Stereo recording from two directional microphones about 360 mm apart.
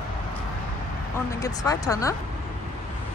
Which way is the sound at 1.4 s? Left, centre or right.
Centre.